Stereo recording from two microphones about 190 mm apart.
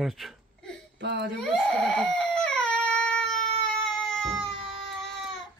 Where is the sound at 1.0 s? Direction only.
65° right (ahead or behind).